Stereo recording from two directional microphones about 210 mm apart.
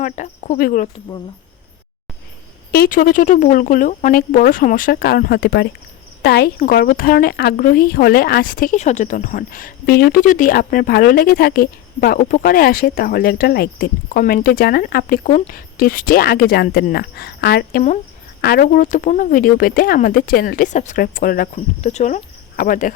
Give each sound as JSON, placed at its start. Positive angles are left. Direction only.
{"t": 0.0, "sound": "speech", "side_deg": 35}
{"t": 2.7, "sound": "a woman's voice", "side_deg": 45}